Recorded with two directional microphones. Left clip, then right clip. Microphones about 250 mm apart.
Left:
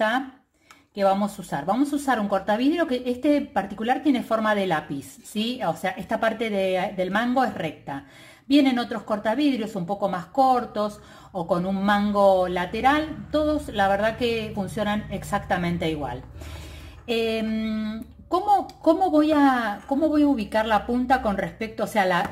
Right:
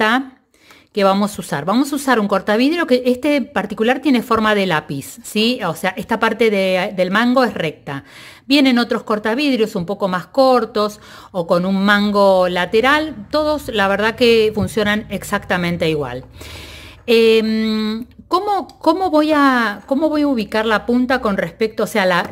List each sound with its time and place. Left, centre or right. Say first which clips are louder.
0.9 s speech: right 7 dB; right